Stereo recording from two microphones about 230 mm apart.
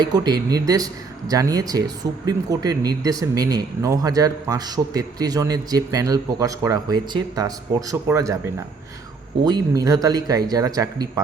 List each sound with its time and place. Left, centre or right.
0.0 s speech: centre
9.4 s speech: centre